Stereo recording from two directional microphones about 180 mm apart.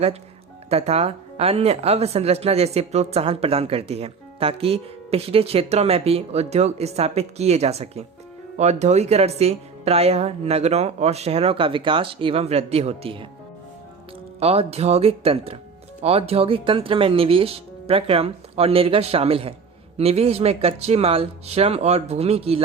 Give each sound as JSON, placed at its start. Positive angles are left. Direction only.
{"t": 0.7, "sound": "speech", "side_deg": -35}
{"t": 14.3, "sound": "speech", "side_deg": -35}